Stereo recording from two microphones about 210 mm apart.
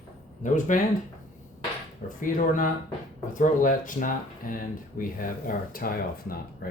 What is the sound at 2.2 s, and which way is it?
Speech, 40° left (ahead or behind).